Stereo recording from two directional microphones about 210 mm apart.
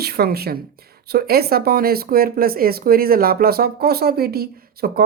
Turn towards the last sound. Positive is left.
turn(degrees=-50)  # may be behind; listen again after turning